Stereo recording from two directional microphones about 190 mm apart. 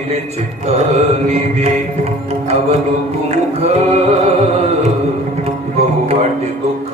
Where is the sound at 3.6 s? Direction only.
35° right (ahead or behind).